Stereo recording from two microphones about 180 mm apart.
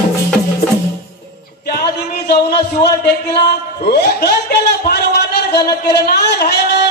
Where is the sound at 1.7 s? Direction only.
60° left (ahead or behind).